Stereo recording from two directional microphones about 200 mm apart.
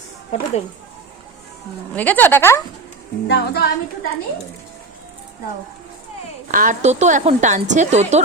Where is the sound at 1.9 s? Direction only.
10° left (ahead or behind).